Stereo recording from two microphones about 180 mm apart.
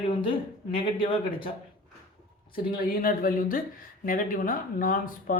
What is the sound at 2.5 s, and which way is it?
Speech, 55° left (ahead or behind).